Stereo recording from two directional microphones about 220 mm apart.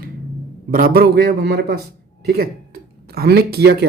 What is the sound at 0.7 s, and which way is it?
Speech, 40° right (ahead or behind).